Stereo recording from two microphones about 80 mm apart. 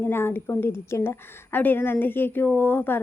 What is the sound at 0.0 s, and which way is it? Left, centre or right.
A woman's voice, left.